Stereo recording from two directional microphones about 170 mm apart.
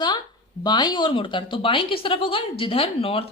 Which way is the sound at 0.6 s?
25° left (ahead or behind).